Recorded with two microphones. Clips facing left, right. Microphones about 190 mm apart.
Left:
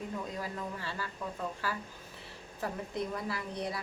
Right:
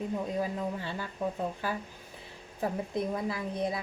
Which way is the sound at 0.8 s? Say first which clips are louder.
Right 5 dB; 20° right (ahead or behind).